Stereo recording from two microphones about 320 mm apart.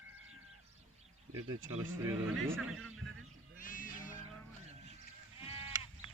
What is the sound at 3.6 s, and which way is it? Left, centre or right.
Music, left.